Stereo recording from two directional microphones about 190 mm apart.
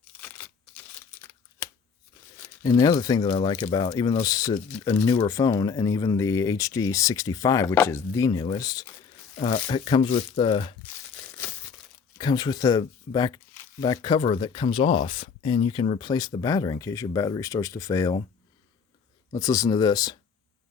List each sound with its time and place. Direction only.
0.2 s a sound: 10° left (ahead or behind)
2.6 s speech: 20° left (ahead or behind)
11.2 s crumpling: 10° left (ahead or behind)
12.1 s speech: 20° left (ahead or behind)
19.3 s speech: 15° left (ahead or behind)